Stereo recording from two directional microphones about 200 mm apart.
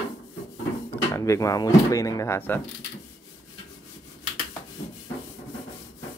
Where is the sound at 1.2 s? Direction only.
15° left (ahead or behind).